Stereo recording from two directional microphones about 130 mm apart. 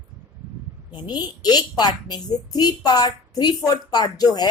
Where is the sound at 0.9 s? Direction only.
35° left (ahead or behind).